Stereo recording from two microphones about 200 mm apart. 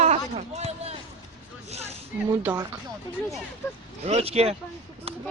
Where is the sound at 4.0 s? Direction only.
30° right (ahead or behind).